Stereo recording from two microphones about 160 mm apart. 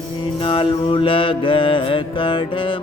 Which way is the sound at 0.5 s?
35° left (ahead or behind).